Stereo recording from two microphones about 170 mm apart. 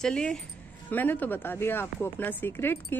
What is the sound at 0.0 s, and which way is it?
A woman's voice, 5° left (ahead or behind).